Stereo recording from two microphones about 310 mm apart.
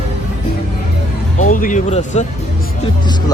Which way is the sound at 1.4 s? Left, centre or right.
Left.